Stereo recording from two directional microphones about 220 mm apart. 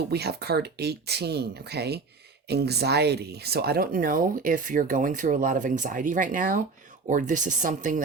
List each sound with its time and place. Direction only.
0.1 s speech: 45° right (ahead or behind)